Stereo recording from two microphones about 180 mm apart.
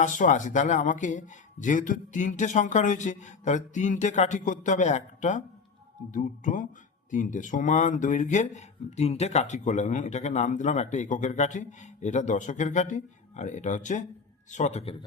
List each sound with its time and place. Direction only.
0.0 s speech: 45° left (ahead or behind)